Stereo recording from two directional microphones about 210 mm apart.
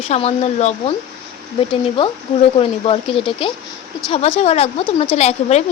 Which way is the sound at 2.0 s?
25° left (ahead or behind).